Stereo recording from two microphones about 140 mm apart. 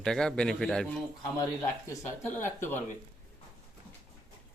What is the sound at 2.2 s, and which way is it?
Speech, 15° left (ahead or behind).